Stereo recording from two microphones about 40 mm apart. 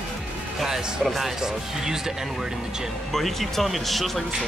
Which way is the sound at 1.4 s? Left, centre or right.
Centre.